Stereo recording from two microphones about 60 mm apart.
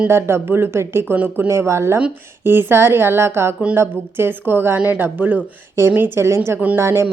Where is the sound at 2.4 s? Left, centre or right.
Right.